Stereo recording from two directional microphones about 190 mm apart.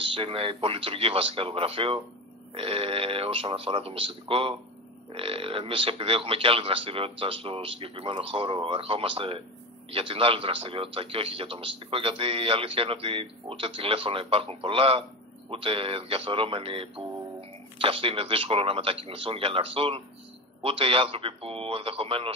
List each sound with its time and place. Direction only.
0.0 s a man's voice: 30° right (ahead or behind)